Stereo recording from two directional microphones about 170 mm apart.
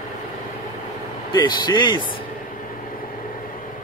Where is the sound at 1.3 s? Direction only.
25° left (ahead or behind).